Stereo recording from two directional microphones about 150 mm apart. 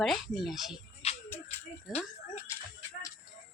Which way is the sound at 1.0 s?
45° left (ahead or behind).